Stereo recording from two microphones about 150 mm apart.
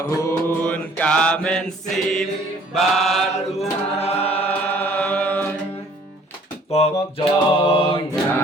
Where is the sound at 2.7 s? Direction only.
Centre (ahead or behind).